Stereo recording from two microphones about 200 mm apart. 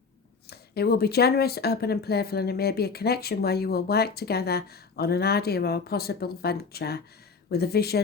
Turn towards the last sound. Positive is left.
turn(degrees=50)  # may be behind; listen again after turning